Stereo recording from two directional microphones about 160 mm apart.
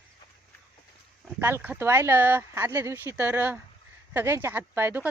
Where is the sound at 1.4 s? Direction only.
15° right (ahead or behind).